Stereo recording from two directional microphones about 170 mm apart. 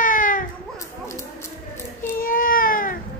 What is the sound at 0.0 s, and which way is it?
Baby cry, 50° left (ahead or behind).